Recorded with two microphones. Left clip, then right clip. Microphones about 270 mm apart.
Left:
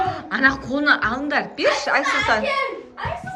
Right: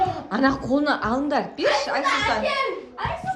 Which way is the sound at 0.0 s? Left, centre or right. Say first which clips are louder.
Left 3 dB; centre.